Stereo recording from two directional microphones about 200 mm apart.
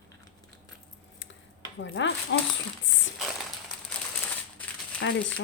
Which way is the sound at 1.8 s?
65° left (ahead or behind).